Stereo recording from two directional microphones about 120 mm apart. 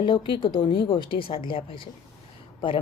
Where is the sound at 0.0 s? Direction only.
45° left (ahead or behind).